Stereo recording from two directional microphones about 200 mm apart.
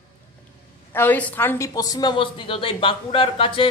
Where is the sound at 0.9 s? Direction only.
10° left (ahead or behind).